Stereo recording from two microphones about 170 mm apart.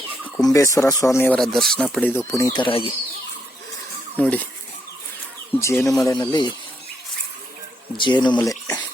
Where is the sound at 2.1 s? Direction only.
15° left (ahead or behind); by 2.8 s 30° left (ahead or behind).